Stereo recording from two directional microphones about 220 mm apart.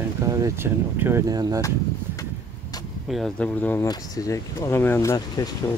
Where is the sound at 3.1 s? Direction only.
5° left (ahead or behind).